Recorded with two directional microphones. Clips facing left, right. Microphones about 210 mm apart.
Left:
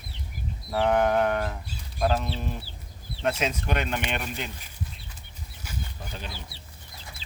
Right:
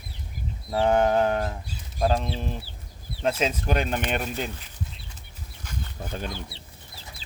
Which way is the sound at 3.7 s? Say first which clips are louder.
Right 3 dB; 40° right (ahead or behind).